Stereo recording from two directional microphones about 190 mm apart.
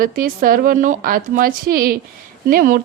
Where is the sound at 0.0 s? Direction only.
45° right (ahead or behind).